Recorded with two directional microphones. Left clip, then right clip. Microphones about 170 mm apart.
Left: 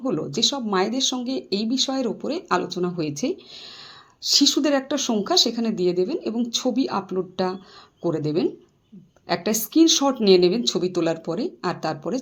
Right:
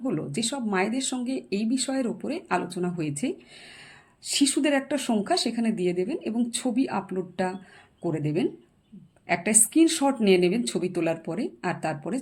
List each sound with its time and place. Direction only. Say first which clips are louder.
0.0 s speech: left 7 dB; 5° right (ahead or behind)